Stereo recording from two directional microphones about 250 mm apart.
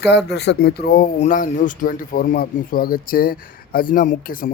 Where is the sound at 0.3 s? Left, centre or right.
Left.